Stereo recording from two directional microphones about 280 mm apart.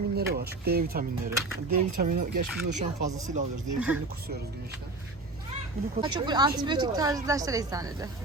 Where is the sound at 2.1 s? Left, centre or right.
Right.